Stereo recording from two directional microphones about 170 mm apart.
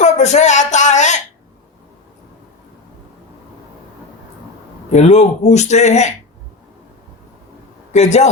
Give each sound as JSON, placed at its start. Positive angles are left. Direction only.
{"t": 0.0, "sound": "a sound", "side_deg": 40}
{"t": 4.9, "sound": "speech", "side_deg": 40}
{"t": 7.9, "sound": "speech", "side_deg": 45}